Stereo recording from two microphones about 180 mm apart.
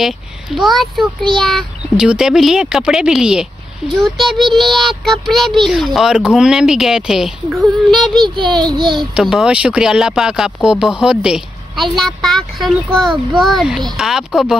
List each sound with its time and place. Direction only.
0.6 s a child's voice: centre (ahead or behind)
8.4 s a child's voice: 25° right (ahead or behind)
9.1 s a child's voice: 5° right (ahead or behind)